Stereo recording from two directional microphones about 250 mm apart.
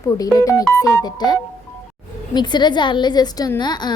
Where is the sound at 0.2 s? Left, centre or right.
Centre.